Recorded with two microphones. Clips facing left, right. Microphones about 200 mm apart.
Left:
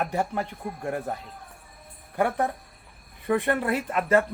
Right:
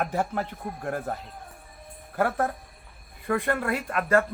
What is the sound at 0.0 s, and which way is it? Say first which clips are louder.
Speech: even; centre (ahead or behind).